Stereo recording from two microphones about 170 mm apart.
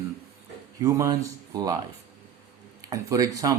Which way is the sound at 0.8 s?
20° right (ahead or behind).